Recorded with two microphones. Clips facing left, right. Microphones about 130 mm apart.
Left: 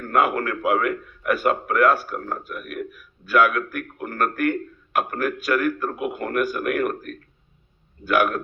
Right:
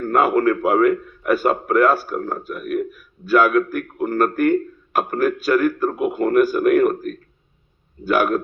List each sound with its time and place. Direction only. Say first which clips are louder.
0.1 s a man's voice: right 5 dB; 30° right (ahead or behind)